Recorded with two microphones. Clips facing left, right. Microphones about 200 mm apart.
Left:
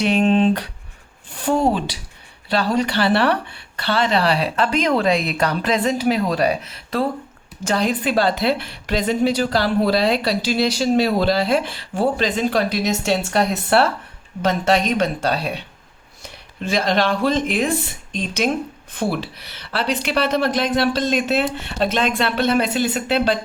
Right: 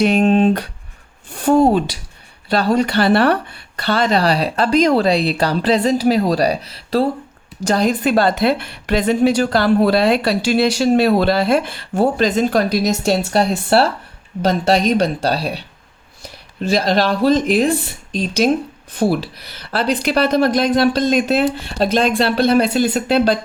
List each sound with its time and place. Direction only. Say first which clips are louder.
0.0 s a woman's voice: right 3 dB; 45° right (ahead or behind)